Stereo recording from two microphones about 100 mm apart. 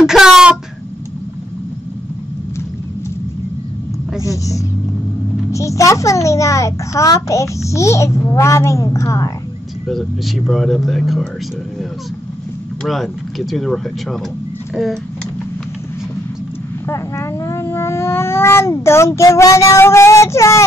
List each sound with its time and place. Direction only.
0.0 s a sound: 5° right (ahead or behind)
4.2 s a sound: 35° left (ahead or behind)
5.5 s a child's voice: 30° left (ahead or behind)
9.8 s speech: centre (ahead or behind)
12.8 s speech: centre (ahead or behind)
16.8 s speech: 30° left (ahead or behind)